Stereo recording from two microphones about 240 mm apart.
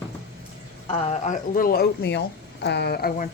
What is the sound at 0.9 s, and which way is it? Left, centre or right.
Speech, left.